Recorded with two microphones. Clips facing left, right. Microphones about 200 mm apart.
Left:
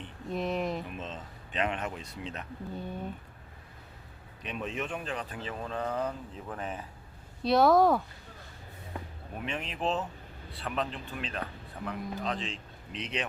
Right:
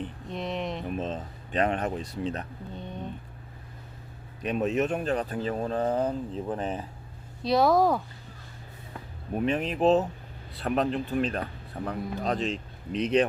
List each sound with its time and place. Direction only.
0.3 s speech: centre (ahead or behind)
0.9 s speech: 40° right (ahead or behind)
2.7 s speech: 5° left (ahead or behind)
4.4 s speech: 45° right (ahead or behind)
7.4 s speech: centre (ahead or behind)
9.3 s speech: 40° right (ahead or behind)